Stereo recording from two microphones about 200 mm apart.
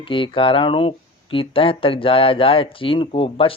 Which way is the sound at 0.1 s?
25° left (ahead or behind).